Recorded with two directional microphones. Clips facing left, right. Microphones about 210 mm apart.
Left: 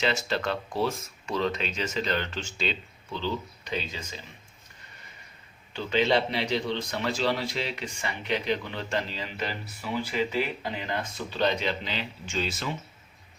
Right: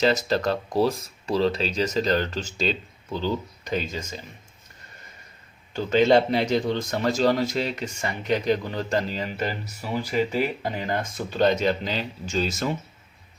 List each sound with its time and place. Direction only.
0.0 s speech: 40° right (ahead or behind)
5.7 s a man's voice: 45° right (ahead or behind)